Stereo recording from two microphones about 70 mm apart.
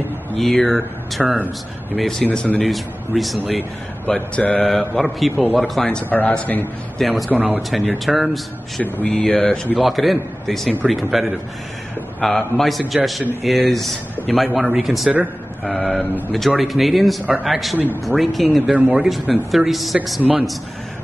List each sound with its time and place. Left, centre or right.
0.4 s speech: centre
2.3 s a man's voice: centre
2.6 s speech: centre
4.1 s mantra: centre
4.6 s speech: centre
6.0 s a man's voice: left
7.0 s speech: centre
7.2 s speech: right
7.7 s speech: centre
8.8 s a man's voice: left
9.1 s mantra: centre
9.8 s speech: centre
18.8 s speech: centre
19.0 s speech: centre